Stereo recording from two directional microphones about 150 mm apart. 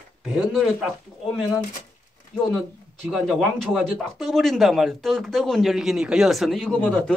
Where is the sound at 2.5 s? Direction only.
5° right (ahead or behind).